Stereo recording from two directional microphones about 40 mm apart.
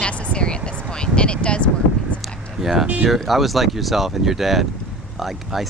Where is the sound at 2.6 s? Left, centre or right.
Centre.